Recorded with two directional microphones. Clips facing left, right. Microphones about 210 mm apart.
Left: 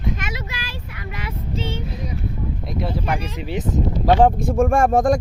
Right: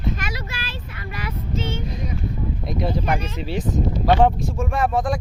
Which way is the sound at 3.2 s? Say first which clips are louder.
Even; 15° left (ahead or behind).